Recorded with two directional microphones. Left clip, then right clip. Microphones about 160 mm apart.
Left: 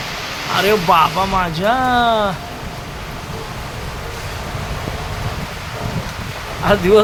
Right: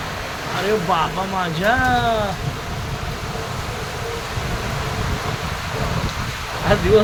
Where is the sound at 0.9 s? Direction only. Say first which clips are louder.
Left 8 dB; 25° left (ahead or behind).